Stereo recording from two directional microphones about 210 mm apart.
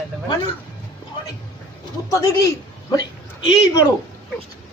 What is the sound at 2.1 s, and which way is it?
Speech, 15° left (ahead or behind).